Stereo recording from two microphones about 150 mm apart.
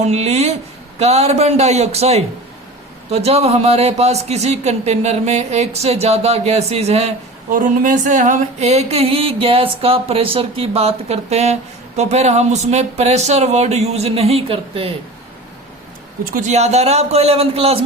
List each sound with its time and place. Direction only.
0.0 s speech: 45° right (ahead or behind)
7.5 s speech: 60° right (ahead or behind); by 14.9 s 40° right (ahead or behind)
16.3 s speech: 50° right (ahead or behind)